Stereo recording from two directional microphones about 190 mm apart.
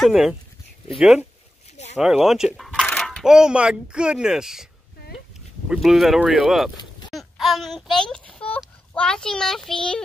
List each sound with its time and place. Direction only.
0.0 s speech: 5° right (ahead or behind)
5.7 s speech: centre (ahead or behind)